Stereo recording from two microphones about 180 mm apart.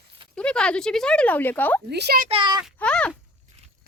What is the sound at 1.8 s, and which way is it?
Speech, 65° right (ahead or behind).